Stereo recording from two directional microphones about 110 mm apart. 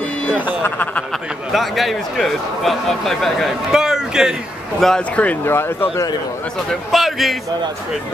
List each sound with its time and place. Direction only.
0.7 s speech: 15° left (ahead or behind)
1.5 s speech: centre (ahead or behind); by 5.9 s 20° left (ahead or behind)
6.7 s speech: centre (ahead or behind)